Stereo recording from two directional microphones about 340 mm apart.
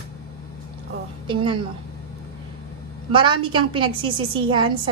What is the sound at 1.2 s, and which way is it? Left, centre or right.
Speech, centre.